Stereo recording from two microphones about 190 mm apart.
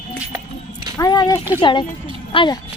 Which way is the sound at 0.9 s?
20° left (ahead or behind).